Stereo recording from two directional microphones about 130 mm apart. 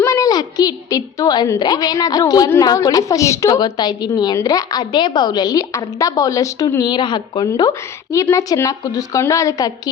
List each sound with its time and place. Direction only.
0.0 s a woman's voice: 25° left (ahead or behind)
7.7 s a woman's voice: 20° left (ahead or behind)